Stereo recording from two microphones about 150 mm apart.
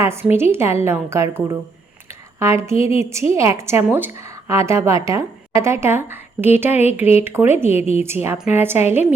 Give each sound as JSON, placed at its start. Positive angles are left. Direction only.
{"t": 0.0, "sound": "a woman's voice", "side_deg": -15}